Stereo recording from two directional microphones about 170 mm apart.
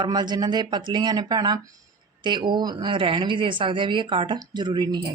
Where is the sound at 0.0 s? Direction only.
25° right (ahead or behind).